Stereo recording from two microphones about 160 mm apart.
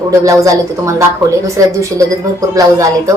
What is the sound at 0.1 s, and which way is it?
A woman's voice, 20° right (ahead or behind).